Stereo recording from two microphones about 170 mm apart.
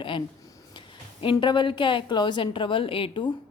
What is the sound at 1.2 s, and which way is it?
A woman's voice, 30° left (ahead or behind).